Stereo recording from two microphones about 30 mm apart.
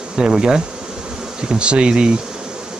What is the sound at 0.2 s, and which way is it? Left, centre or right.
Speech, right.